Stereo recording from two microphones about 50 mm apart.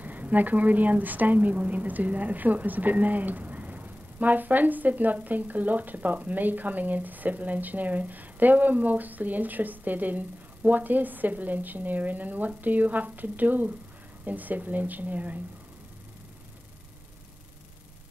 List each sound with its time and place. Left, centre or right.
0.0 s a woman's voice: right